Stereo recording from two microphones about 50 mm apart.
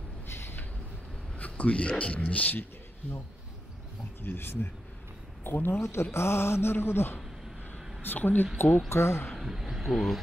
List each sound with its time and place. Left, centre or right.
0.3 s a sound: left
1.4 s a man's voice: left
4.2 s mantra: left
5.8 s speech: left
6.1 s mantra: left
8.0 s speech: left
8.8 s speech: left
9.3 s speech: centre